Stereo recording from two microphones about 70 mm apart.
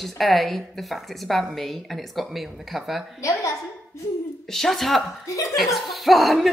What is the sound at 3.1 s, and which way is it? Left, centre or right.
Speech, left.